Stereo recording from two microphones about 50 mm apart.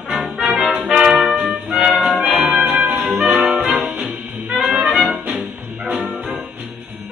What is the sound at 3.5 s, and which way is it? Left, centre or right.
Brass instrument, centre.